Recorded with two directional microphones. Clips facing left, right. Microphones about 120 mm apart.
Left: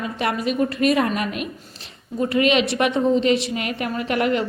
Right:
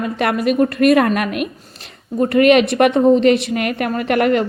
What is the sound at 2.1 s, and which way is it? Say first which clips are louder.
A woman's voice: right 7 dB; 55° right (ahead or behind).